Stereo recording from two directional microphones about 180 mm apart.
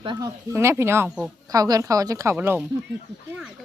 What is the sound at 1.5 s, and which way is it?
Speech, 20° right (ahead or behind).